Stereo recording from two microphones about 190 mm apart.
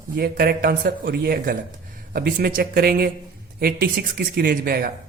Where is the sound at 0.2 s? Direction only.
50° right (ahead or behind).